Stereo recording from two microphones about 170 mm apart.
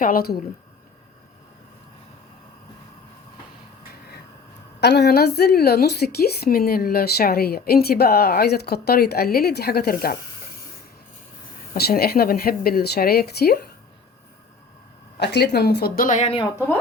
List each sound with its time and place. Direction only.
0.0 s speech: 60° left (ahead or behind)
4.8 s a woman's voice: 75° left (ahead or behind)
11.7 s speech: 65° left (ahead or behind)
15.2 s a woman's voice: 80° left; by 16.3 s 45° left (ahead or behind)